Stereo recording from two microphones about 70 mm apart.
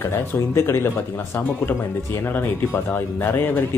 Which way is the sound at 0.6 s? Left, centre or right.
Left.